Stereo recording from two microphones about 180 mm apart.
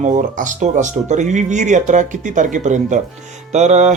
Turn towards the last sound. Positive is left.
turn(degrees=-40)  # may be behind; listen again after turning